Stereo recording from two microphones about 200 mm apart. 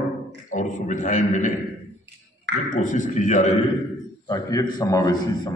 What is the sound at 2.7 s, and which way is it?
Speech, 40° left (ahead or behind).